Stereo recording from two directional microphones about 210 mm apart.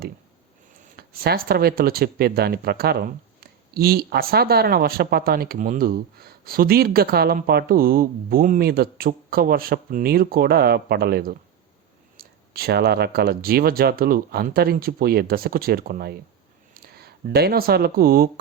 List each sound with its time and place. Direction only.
0.9 s speech: 50° right (ahead or behind)